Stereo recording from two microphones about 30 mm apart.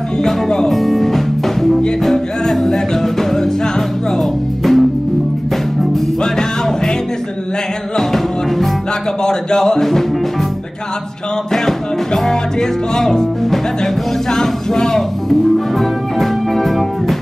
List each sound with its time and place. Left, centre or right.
0.2 s music: left
0.7 s music: centre
9.2 s music: centre
11.5 s music: centre
14.3 s speech: centre
15.8 s music: centre